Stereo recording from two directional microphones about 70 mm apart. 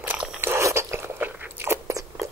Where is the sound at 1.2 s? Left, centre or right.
Right.